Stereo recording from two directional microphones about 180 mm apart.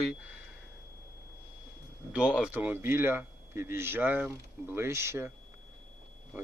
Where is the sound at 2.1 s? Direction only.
5° right (ahead or behind).